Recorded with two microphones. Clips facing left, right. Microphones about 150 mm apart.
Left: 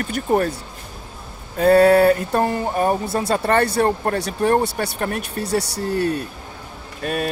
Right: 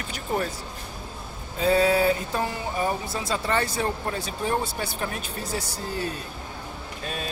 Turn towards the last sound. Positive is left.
turn(degrees=60)  # may be behind; listen again after turning